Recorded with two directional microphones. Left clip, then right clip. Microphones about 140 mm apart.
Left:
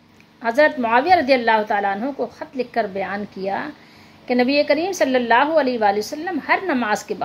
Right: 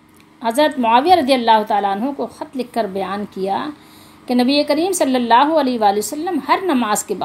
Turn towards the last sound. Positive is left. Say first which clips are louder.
# right 3 dB
turn(degrees=-25)  # may be behind; listen again after turning